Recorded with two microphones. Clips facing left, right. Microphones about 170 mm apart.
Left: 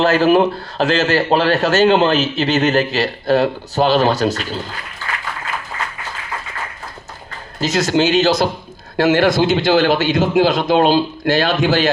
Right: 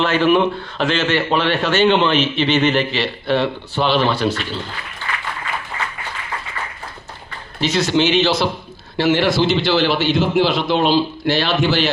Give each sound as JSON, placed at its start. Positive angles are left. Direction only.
{"t": 0.0, "sound": "a man's voice", "side_deg": 40}
{"t": 7.6, "sound": "a man's voice", "side_deg": 40}